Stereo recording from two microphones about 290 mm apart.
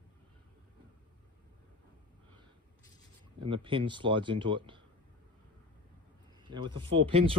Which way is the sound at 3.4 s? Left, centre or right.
Centre.